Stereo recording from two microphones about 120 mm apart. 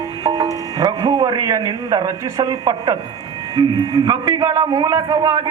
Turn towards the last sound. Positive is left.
turn(degrees=-25)  # may be behind; listen again after turning